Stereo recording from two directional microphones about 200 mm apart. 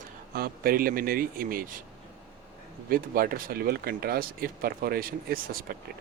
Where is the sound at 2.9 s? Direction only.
45° right (ahead or behind).